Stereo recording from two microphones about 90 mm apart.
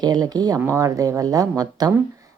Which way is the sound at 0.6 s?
35° right (ahead or behind).